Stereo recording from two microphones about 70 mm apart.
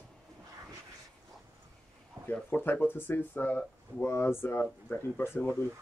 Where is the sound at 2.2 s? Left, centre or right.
Right.